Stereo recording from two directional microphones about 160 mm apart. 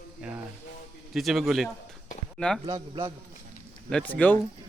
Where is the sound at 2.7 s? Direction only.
20° right (ahead or behind).